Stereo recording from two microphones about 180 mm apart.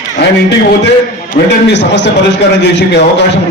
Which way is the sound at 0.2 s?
70° left (ahead or behind).